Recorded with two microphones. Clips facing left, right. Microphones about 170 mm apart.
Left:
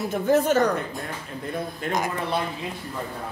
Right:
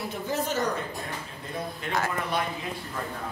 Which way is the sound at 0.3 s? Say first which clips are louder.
Left 10 dB; 55° left (ahead or behind).